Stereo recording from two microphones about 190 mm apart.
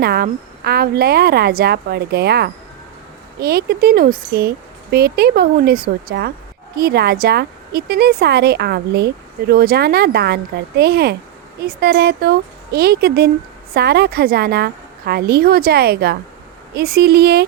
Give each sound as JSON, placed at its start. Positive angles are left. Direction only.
{"t": 0.0, "sound": "a woman's voice", "side_deg": -55}